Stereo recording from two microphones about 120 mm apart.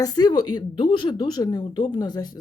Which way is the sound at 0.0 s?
35° left (ahead or behind).